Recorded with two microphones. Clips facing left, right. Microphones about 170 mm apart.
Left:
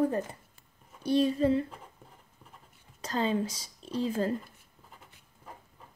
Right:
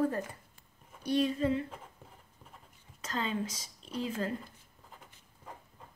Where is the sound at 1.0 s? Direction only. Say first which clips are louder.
Left 4 dB; 30° left (ahead or behind).